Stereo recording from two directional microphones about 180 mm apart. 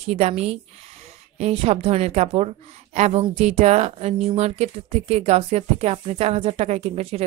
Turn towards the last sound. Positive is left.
turn(degrees=-35)  # may be behind; listen again after turning